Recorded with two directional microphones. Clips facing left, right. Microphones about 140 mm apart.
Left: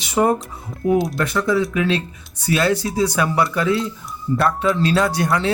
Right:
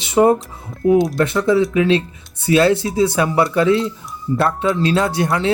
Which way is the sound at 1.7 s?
25° right (ahead or behind).